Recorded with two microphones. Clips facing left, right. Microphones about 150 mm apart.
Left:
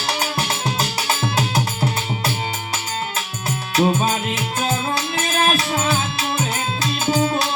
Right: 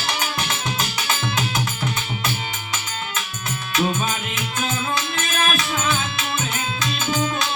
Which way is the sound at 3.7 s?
35° left (ahead or behind).